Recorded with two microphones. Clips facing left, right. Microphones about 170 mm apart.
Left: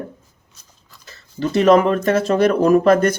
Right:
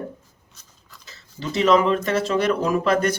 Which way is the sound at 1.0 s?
55° left (ahead or behind).